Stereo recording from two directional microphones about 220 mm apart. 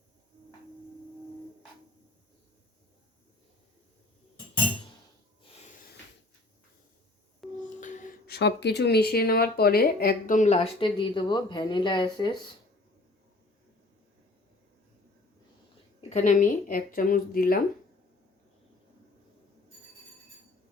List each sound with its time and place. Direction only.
7.4 s a sound: centre (ahead or behind)
7.8 s speech: 35° left (ahead or behind)
16.0 s speech: 35° left (ahead or behind)